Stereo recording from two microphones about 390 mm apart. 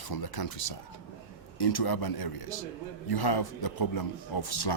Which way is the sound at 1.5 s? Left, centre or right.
Left.